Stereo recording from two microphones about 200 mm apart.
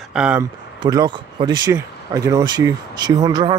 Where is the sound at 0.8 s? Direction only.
20° right (ahead or behind).